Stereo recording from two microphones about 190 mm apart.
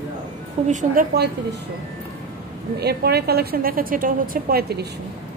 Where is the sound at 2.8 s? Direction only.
55° right (ahead or behind).